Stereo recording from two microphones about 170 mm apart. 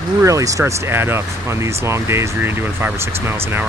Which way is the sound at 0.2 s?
20° right (ahead or behind).